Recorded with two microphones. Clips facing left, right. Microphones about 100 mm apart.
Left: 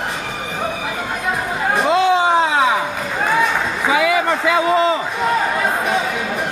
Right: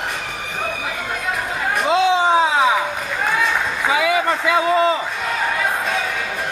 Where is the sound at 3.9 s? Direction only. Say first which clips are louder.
Left 2 dB; centre (ahead or behind).